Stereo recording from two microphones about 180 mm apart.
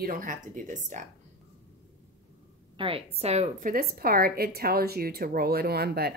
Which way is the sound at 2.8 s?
30° right (ahead or behind).